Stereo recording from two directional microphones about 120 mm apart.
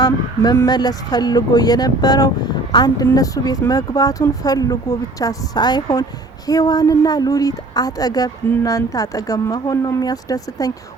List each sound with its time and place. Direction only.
0.0 s speech: 30° left (ahead or behind)